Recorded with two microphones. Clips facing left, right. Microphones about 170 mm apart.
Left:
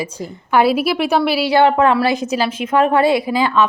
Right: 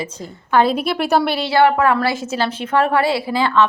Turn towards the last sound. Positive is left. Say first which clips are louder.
# left 2 dB
turn(degrees=15)  # may be behind; listen again after turning